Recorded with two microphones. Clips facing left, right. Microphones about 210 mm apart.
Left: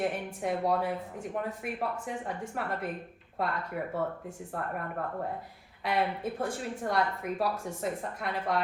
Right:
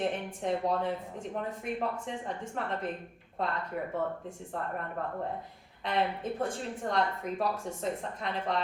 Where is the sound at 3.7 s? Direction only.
5° left (ahead or behind).